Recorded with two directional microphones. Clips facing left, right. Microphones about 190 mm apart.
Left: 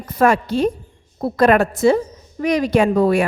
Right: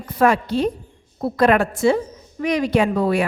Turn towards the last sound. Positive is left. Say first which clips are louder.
# left 3 dB
turn(degrees=45)  # may be behind; listen again after turning